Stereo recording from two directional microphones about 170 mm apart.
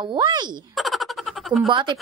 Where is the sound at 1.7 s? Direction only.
30° right (ahead or behind).